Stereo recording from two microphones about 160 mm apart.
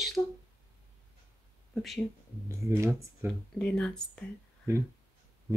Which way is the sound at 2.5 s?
20° right (ahead or behind).